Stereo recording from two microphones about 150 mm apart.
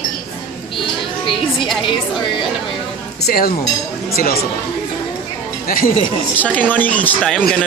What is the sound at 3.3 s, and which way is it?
Speech, 80° left.